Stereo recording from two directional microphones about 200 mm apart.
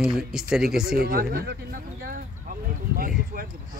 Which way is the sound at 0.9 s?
50° right (ahead or behind).